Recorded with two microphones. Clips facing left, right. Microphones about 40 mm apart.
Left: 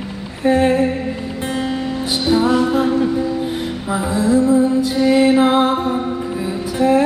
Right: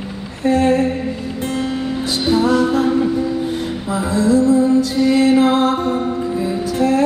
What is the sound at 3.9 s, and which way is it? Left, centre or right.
Music, centre.